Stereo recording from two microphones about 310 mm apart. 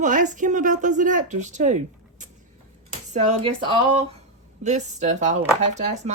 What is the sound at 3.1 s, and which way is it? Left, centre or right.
Speech, right.